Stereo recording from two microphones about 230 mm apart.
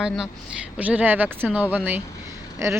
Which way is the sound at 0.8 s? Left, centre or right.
Centre.